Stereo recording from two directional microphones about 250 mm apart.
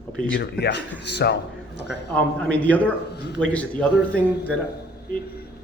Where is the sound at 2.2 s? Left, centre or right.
Centre.